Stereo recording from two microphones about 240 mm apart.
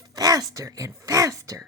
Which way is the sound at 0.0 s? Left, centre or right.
Centre.